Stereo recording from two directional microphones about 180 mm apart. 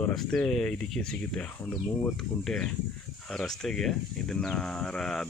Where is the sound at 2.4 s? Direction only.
5° left (ahead or behind).